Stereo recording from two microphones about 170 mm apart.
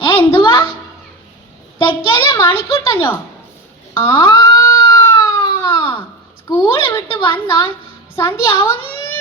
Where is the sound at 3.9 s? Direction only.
30° left (ahead or behind).